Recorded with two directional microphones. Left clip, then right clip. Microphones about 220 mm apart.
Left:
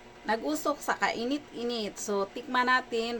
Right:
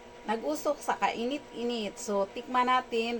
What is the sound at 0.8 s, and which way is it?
A woman's voice, 15° left (ahead or behind).